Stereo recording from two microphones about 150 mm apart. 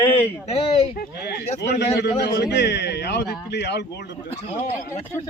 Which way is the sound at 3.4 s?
90° left.